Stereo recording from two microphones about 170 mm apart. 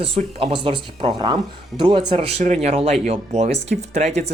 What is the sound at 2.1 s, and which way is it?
Speech, 35° right (ahead or behind).